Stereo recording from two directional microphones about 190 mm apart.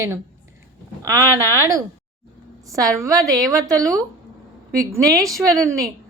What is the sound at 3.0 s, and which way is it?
Speech, 15° right (ahead or behind).